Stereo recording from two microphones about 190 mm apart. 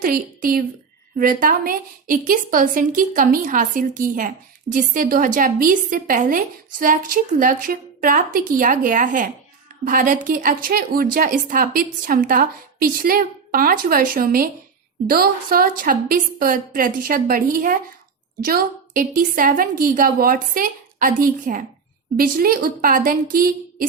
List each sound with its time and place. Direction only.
0.0 s a woman's voice: 45° right (ahead or behind)